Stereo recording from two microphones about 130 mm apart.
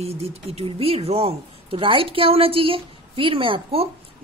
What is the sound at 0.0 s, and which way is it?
Speech, 50° right (ahead or behind).